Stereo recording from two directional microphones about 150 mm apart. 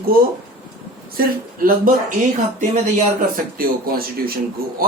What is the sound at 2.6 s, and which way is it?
Speech, 55° right (ahead or behind).